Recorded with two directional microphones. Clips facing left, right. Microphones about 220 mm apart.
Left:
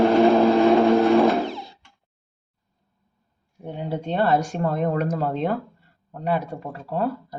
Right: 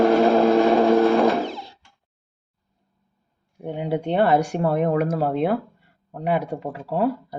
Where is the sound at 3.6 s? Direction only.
15° right (ahead or behind).